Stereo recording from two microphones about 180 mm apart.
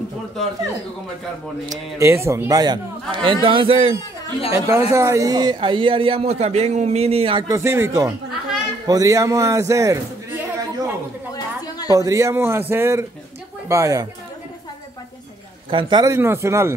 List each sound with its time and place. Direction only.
1.7 s a man's voice: 15° right (ahead or behind)
4.6 s a man's voice: 15° right (ahead or behind)
7.5 s a man's voice: 15° right (ahead or behind)
11.3 s chatter: 20° left (ahead or behind)
11.9 s speech: 20° right (ahead or behind)
15.7 s speech: 25° right (ahead or behind)